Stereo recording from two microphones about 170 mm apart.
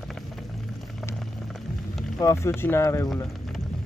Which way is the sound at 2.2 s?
15° left (ahead or behind).